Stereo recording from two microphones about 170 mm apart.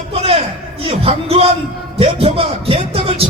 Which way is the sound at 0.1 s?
35° right (ahead or behind).